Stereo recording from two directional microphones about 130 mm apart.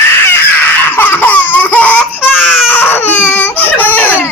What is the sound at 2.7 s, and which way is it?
Baby cry, 15° left (ahead or behind).